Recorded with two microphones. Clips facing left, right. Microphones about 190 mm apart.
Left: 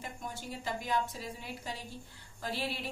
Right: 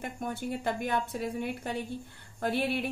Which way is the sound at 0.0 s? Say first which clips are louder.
Right 8 dB; 60° right (ahead or behind).